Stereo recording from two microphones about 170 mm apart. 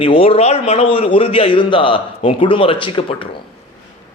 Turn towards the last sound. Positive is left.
turn(degrees=30)  # may be behind; listen again after turning